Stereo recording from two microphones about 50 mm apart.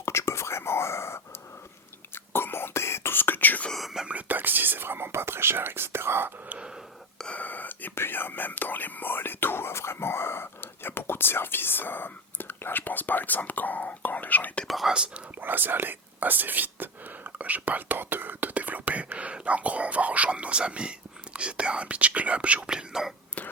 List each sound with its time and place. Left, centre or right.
0.0 s whispering: left
2.1 s whispering: left
3.7 s whispering: centre
4.3 s whispering: right
7.3 s whispering: left
14.8 s whispering: centre
15.4 s whispering: right; by 23.1 s centre